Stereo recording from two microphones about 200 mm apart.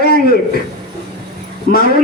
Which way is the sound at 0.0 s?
50° left (ahead or behind).